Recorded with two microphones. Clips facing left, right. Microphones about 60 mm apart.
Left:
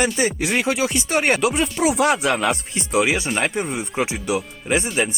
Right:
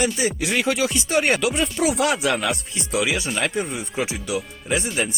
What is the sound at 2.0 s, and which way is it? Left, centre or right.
Speech, left.